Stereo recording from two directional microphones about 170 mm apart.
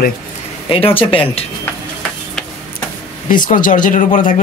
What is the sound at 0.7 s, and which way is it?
Speech, 35° left (ahead or behind).